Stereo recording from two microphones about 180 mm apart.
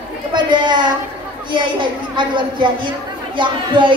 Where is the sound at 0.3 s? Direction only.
25° right (ahead or behind).